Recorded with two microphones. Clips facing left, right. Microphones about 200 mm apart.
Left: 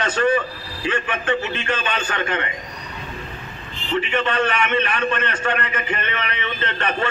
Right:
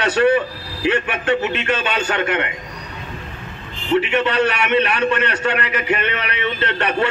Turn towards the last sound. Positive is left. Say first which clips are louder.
# right 4 dB
turn(degrees=-65)  # may be behind; listen again after turning